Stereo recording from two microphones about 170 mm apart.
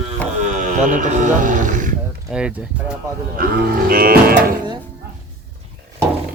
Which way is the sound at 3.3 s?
60° right (ahead or behind).